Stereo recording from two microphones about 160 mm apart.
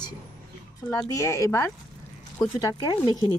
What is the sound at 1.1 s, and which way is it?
A woman's voice, 20° left (ahead or behind).